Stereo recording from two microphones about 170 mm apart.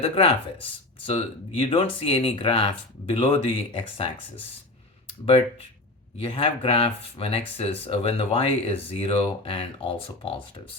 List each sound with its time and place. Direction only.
0.0 s speech: 35° left (ahead or behind)
6.2 s speech: 30° left (ahead or behind)